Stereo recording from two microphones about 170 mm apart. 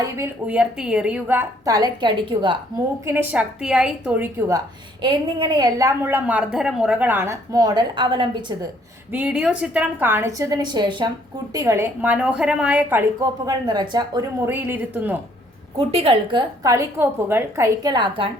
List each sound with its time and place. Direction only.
0.0 s a woman's voice: 10° right (ahead or behind); by 2.6 s 30° right (ahead or behind)
3.1 s a woman's voice: 10° right (ahead or behind); by 8.5 s 25° right (ahead or behind)
9.1 s a woman's voice: 5° right (ahead or behind); by 11.1 s 25° right (ahead or behind)
11.5 s a woman's voice: 15° right (ahead or behind)
13.5 s a woman's voice: 25° right (ahead or behind); by 15.2 s 10° right (ahead or behind)
15.8 s a woman's voice: 35° right (ahead or behind); by 17.7 s 10° right (ahead or behind)
17.8 s a woman's voice: 25° right (ahead or behind)